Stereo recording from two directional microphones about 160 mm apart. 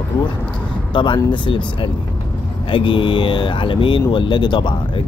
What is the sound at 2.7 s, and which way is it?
Speech, 30° left (ahead or behind).